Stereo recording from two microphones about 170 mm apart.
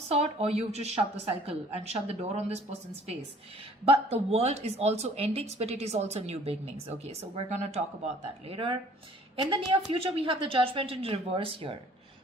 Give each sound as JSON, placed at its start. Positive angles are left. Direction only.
{"t": 0.1, "sound": "a woman's voice", "side_deg": -35}
{"t": 3.8, "sound": "a woman's voice", "side_deg": -35}